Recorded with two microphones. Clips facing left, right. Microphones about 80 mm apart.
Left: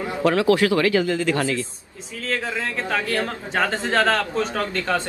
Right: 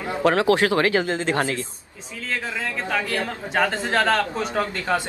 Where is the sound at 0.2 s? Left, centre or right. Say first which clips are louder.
Even; right.